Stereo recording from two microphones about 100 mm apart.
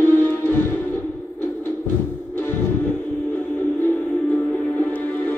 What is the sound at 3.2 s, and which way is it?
Music, 20° left (ahead or behind).